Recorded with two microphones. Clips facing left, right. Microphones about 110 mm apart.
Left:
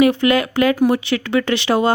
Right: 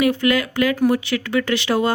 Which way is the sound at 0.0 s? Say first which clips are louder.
Left 4 dB; 25° left (ahead or behind).